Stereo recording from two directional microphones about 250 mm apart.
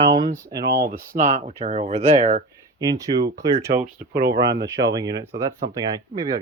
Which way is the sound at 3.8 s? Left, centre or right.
Right.